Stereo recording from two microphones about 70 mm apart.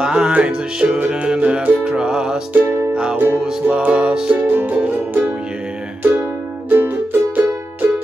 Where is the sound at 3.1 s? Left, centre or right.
Right.